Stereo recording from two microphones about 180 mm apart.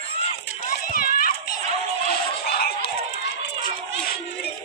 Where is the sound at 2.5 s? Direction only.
60° left (ahead or behind).